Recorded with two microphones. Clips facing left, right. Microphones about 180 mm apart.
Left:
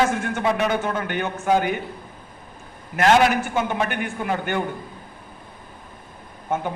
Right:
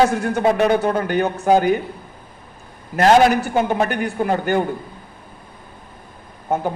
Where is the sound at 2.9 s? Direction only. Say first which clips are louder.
Right 4 dB; 35° right (ahead or behind).